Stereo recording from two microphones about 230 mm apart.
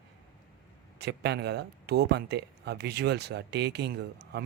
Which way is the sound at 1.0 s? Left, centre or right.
Right.